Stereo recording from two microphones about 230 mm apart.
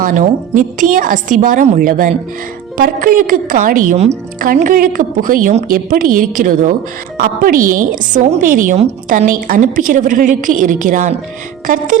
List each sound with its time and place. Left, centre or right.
0.0 s a woman's voice: right